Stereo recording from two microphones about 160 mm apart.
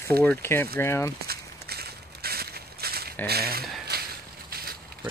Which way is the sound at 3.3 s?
75° right (ahead or behind).